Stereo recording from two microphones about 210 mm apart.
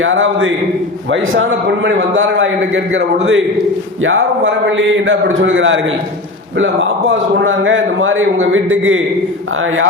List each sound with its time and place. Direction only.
0.0 s a man's voice: 65° right (ahead or behind)
7.1 s a man's voice: 65° right (ahead or behind)